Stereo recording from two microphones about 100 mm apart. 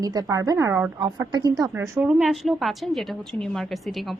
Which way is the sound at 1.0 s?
50° right (ahead or behind).